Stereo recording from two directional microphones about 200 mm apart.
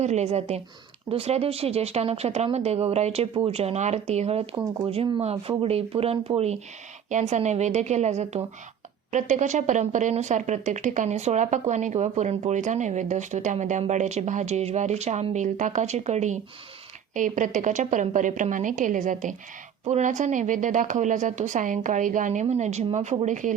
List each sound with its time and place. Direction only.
0.0 s speech: 35° right (ahead or behind)